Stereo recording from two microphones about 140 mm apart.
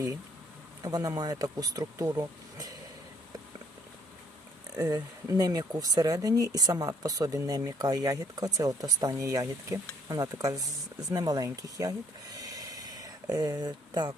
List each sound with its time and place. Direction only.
0.8 s speech: 25° right (ahead or behind)
4.7 s speech: 25° right (ahead or behind)